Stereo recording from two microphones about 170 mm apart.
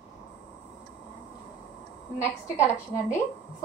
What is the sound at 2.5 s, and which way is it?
Speech, 15° left (ahead or behind).